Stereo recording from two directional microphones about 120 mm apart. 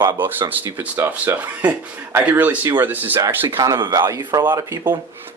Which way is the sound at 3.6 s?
25° right (ahead or behind).